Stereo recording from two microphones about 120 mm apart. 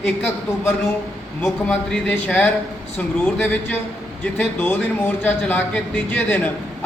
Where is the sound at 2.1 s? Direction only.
15° left (ahead or behind).